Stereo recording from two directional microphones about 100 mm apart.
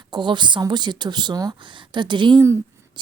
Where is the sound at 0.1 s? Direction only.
50° right (ahead or behind).